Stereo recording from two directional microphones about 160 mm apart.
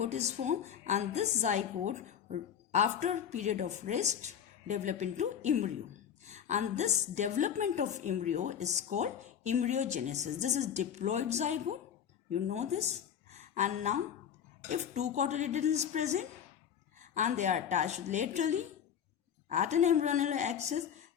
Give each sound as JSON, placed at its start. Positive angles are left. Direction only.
{"t": 0.0, "sound": "a woman's voice", "side_deg": -45}